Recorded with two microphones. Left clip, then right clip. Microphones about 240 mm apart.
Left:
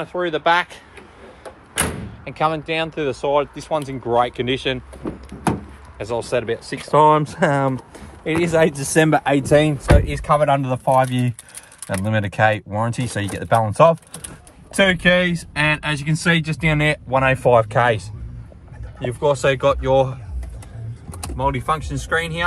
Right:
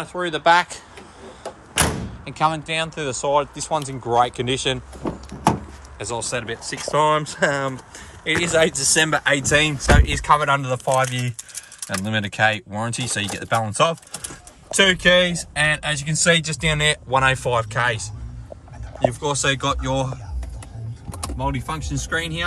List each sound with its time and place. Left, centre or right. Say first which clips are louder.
0.0 s speech: even; centre
1.4 s door: right 3 dB; right
2.2 s speech: left 1 dB; centre
5.9 s speech: left 4 dB; centre
6.4 s speech: left 3 dB; centre
7.0 s speech: left 4 dB; centre
9.1 s speech: left 3 dB; centre
11.9 s speech: left 2 dB; left
14.7 s speech: even; centre
17.4 s speech: left 6 dB; centre
19.1 s speech: left 4 dB; centre